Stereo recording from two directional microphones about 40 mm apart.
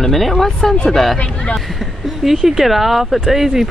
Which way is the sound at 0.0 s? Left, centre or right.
Centre.